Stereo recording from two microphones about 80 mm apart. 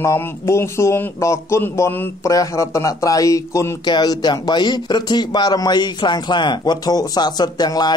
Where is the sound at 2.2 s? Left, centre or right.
Left.